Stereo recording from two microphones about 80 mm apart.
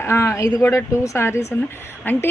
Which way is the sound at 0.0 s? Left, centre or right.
Left.